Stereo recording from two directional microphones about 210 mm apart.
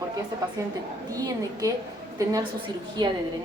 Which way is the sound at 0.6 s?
15° right (ahead or behind).